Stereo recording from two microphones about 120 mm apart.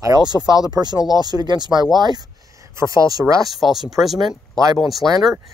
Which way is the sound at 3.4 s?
Centre (ahead or behind).